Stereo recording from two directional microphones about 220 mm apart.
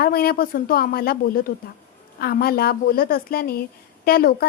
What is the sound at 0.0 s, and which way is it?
A woman's voice, 45° left (ahead or behind).